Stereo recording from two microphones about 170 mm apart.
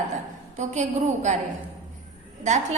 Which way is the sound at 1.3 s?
45° right (ahead or behind).